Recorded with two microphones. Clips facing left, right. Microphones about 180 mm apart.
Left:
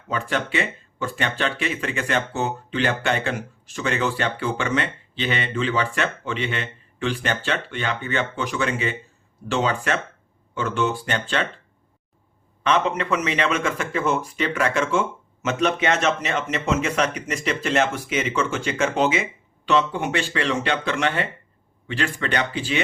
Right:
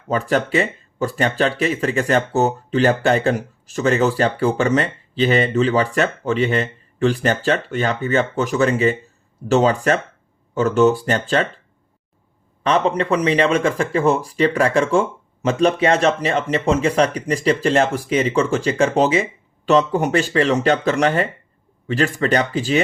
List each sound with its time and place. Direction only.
0.1 s speech: 40° right (ahead or behind)
12.6 s speech: 35° right (ahead or behind)